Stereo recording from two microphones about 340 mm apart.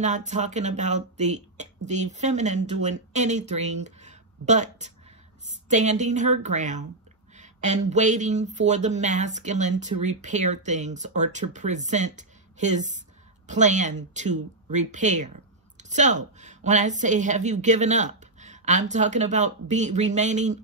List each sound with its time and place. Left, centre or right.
0.0 s speech: right